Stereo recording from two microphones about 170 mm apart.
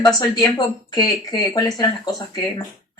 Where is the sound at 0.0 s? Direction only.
20° left (ahead or behind).